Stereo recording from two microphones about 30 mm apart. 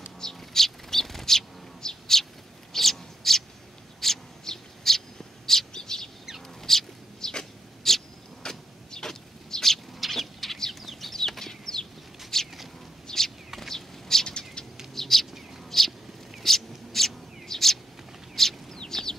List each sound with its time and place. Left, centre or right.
0.2 s bird: centre
5.7 s bird: left
6.6 s a sound: centre
10.1 s bird: centre
11.1 s chicken: centre
12.3 s a sound: centre
13.6 s bird: centre
14.2 s bird: left
15.0 s bird: centre
15.7 s a sound: centre
17.5 s bird: centre
18.3 s chicken: centre